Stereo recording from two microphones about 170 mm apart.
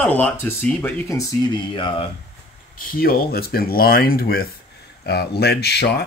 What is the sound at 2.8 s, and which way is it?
Speech, 60° left (ahead or behind).